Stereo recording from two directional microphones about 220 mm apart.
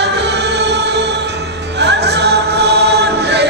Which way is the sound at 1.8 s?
50° right (ahead or behind).